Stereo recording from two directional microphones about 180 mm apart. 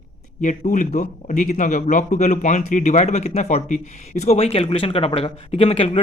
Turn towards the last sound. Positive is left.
turn(degrees=35)  # may be behind; listen again after turning